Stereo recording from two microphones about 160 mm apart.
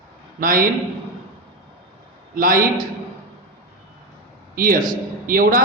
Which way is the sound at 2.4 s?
60° right (ahead or behind).